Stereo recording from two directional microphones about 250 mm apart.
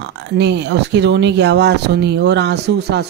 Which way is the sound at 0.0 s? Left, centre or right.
Right.